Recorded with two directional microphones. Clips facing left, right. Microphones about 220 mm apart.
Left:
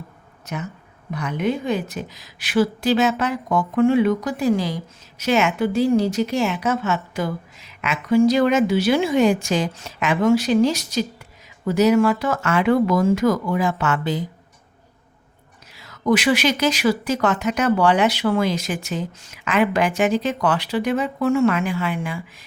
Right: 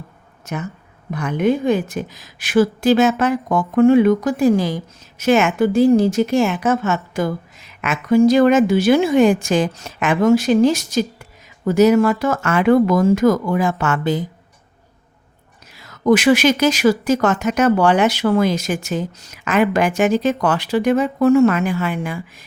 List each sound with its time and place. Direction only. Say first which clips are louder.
1.1 s a woman's voice: right 5 dB; 50° right (ahead or behind)
15.7 s a woman's voice: right 4 dB; 45° right (ahead or behind)